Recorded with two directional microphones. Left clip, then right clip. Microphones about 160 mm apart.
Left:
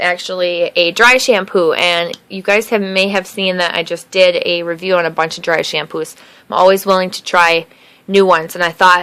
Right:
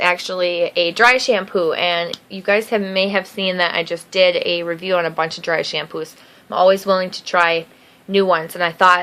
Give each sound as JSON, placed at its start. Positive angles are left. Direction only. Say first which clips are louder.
{"t": 0.0, "sound": "a woman's voice", "louder": "left 2 dB", "side_deg": 15}